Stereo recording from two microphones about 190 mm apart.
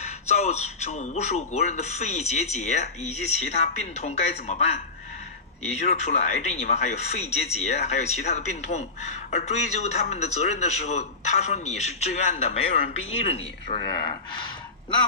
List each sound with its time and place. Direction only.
0.0 s a man's voice: 35° left (ahead or behind)
5.6 s a man's voice: 35° left (ahead or behind)